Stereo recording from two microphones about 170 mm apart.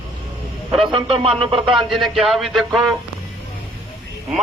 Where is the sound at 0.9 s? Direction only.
30° right (ahead or behind).